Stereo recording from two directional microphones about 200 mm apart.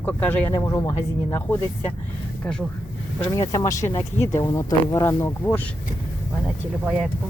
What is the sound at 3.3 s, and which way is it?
Speech, 15° left (ahead or behind).